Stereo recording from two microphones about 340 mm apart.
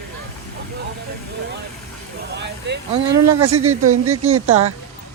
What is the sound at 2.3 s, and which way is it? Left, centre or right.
Speech, right.